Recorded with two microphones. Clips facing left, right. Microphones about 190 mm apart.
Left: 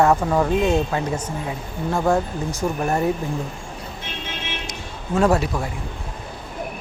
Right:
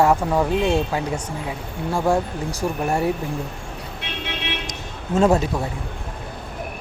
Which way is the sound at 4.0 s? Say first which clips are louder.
Right 2 dB; 65° right (ahead or behind).